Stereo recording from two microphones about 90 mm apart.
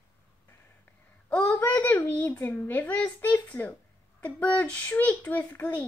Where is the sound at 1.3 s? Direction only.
20° left (ahead or behind).